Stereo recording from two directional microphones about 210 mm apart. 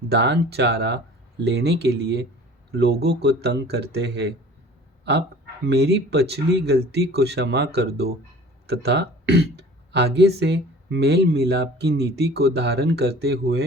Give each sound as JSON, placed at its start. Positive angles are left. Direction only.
{"t": 0.1, "sound": "speech", "side_deg": -55}
{"t": 5.6, "sound": "speech", "side_deg": -50}